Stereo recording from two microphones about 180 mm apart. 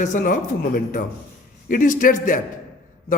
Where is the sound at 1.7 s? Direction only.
50° left (ahead or behind).